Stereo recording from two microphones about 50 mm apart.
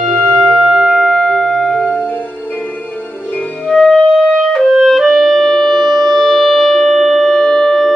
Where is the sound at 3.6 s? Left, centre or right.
Centre.